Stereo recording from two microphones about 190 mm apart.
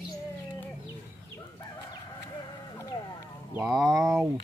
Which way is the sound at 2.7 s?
20° left (ahead or behind).